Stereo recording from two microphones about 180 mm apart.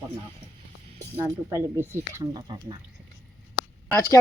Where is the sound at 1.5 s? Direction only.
15° right (ahead or behind).